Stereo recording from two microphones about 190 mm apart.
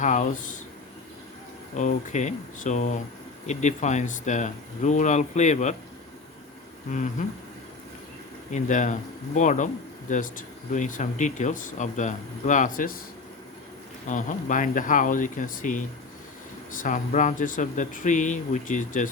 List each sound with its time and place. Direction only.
0.0 s speech: 40° left (ahead or behind)
1.7 s speech: 40° left (ahead or behind)
6.9 s speech: 40° left (ahead or behind)
8.5 s speech: 40° left (ahead or behind)
14.1 s speech: 45° left (ahead or behind)
16.8 s speech: 40° left (ahead or behind)